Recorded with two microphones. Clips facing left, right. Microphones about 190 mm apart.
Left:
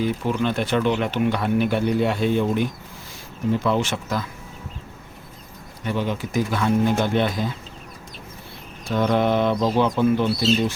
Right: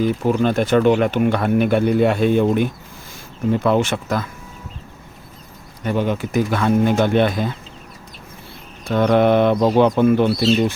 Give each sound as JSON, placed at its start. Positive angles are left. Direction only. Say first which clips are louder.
{"t": 0.0, "sound": "speech", "louder": "right 5 dB", "side_deg": -45}
{"t": 5.8, "sound": "speech", "louder": "right 5 dB", "side_deg": -50}
{"t": 8.9, "sound": "speech", "louder": "right 5 dB", "side_deg": -60}